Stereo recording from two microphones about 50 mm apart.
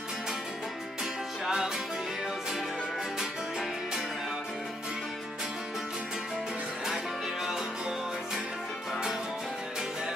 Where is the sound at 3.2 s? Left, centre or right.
Centre.